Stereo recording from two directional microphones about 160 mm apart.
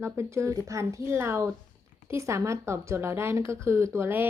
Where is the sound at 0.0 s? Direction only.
15° right (ahead or behind).